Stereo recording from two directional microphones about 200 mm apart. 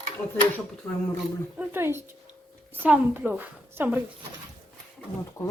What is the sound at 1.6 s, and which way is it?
A child's voice, 10° right (ahead or behind).